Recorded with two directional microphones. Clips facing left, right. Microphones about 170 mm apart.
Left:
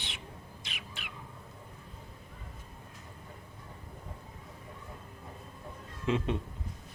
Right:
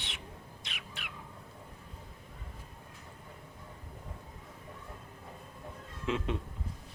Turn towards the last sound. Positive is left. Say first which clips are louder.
# left 3 dB
turn(degrees=0)  # may be behind; listen again after turning